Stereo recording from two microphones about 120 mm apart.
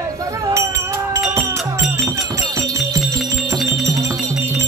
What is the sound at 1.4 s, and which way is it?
Music, 25° right (ahead or behind).